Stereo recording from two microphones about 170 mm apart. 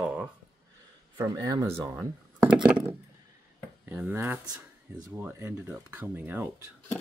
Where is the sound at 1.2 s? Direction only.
20° right (ahead or behind).